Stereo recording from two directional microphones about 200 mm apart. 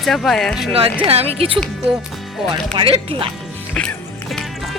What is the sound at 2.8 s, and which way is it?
Speech, 25° right (ahead or behind).